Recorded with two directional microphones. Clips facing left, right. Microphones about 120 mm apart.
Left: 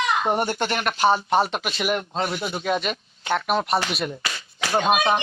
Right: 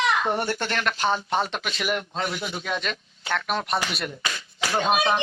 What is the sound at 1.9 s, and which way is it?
Speech, 40° left (ahead or behind).